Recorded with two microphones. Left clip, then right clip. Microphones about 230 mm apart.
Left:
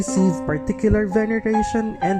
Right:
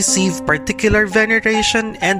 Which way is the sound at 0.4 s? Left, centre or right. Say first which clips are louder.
Right 6 dB; right.